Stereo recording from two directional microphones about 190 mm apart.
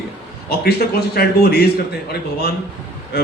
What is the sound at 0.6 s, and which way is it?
A man's voice, 55° left (ahead or behind).